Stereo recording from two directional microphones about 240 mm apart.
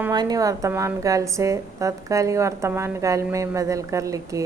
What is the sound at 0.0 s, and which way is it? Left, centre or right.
A woman's voice, centre.